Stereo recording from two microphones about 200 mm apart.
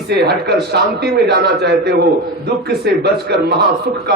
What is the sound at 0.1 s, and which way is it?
A man's voice, 55° right (ahead or behind).